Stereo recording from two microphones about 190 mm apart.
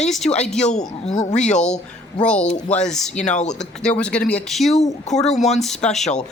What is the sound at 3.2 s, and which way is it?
Speech, 40° left (ahead or behind).